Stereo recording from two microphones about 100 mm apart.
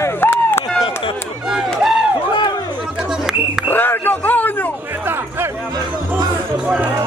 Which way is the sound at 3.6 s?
20° left (ahead or behind).